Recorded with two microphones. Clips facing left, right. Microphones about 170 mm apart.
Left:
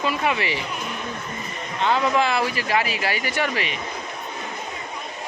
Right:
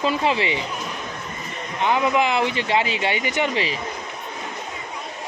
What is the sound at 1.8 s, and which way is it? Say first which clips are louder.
Speech: right 1 dB; 15° right (ahead or behind).